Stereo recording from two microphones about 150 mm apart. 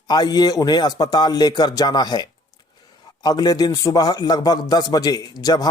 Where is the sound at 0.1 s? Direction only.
25° left (ahead or behind).